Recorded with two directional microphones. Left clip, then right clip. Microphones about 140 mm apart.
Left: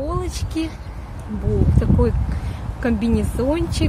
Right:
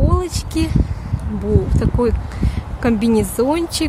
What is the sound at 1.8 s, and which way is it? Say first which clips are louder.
A woman's voice: right 3 dB; 50° right (ahead or behind).